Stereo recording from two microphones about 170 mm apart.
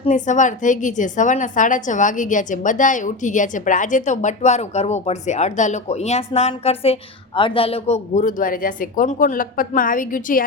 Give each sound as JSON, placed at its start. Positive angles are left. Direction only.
{"t": 0.0, "sound": "a woman's voice", "side_deg": 45}